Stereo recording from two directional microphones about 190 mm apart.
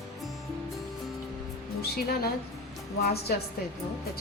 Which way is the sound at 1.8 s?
55° left (ahead or behind).